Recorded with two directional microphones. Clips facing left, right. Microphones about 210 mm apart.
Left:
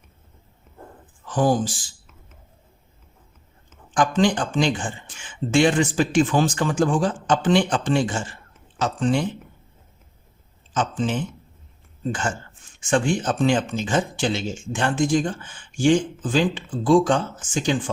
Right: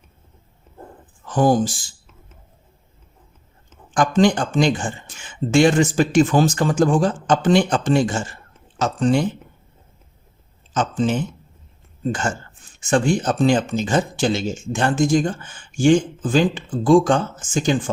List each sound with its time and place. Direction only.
1.3 s speech: 45° right (ahead or behind)
3.9 s speech: 45° right (ahead or behind)
10.8 s speech: 40° right (ahead or behind)